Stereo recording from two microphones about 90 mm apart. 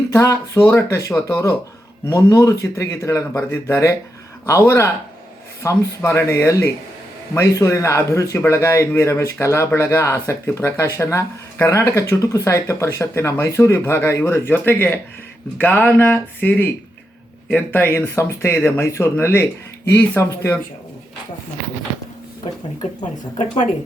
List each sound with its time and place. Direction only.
0.1 s speech: 35° left (ahead or behind)